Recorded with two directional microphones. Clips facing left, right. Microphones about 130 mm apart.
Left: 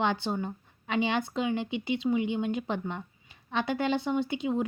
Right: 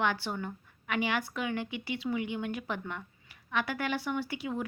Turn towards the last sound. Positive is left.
turn(degrees=20)  # may be behind; listen again after turning